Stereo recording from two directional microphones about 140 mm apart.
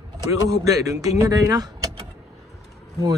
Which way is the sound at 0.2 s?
25° right (ahead or behind).